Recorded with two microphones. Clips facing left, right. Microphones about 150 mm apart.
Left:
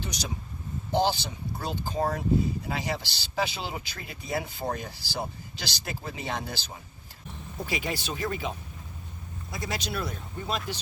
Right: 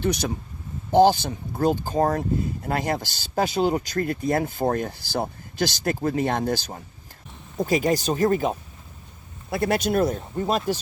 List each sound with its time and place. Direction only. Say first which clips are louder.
0.0 s speech: right 11 dB; 55° right (ahead or behind)
9.5 s speech: right 12 dB; 60° right (ahead or behind)